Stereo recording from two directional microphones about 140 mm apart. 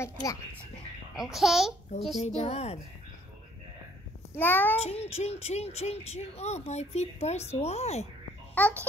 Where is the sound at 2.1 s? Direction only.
50° left (ahead or behind).